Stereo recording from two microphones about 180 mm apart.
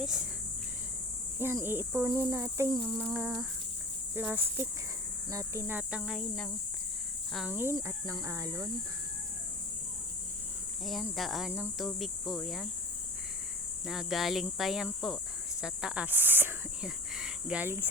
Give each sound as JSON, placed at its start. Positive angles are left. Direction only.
{"t": 0.0, "sound": "speech", "side_deg": -5}
{"t": 1.4, "sound": "speech", "side_deg": -10}
{"t": 10.8, "sound": "speech", "side_deg": 0}
{"t": 13.8, "sound": "speech", "side_deg": 0}